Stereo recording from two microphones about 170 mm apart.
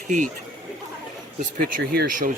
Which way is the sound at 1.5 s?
55° right (ahead or behind).